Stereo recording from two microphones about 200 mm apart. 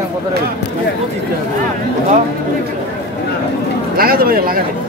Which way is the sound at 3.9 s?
50° right (ahead or behind).